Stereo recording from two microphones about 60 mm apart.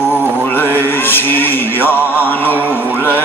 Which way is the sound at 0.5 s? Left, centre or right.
Left.